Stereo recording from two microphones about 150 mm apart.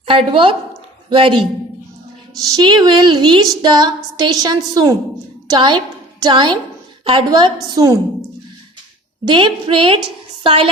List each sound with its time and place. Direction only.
0.0 s a woman's voice: 35° right (ahead or behind)
2.5 s a sound: 30° right (ahead or behind)
5.5 s a woman's voice: 30° right (ahead or behind)
9.2 s a woman's voice: 35° right (ahead or behind)